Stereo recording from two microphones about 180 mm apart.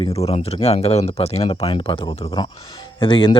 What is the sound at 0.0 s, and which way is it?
Speech, 35° left (ahead or behind).